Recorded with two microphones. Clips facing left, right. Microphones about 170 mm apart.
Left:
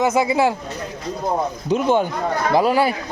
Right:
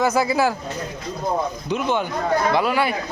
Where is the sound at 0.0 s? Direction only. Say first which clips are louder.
Left 2 dB; 20° left (ahead or behind).